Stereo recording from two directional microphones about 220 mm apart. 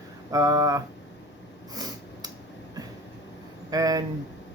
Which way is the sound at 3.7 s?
15° right (ahead or behind).